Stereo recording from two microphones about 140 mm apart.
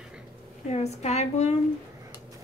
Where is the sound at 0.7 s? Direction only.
50° left (ahead or behind).